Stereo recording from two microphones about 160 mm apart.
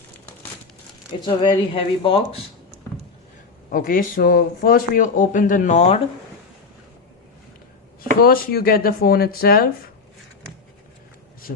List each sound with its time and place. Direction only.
1.2 s speech: 30° left (ahead or behind)
3.7 s a man's voice: 60° left (ahead or behind); by 6.0 s 45° left (ahead or behind)
8.2 s speech: 70° left (ahead or behind)